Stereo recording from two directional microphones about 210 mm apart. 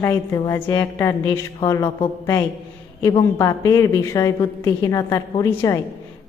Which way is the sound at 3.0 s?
15° left (ahead or behind).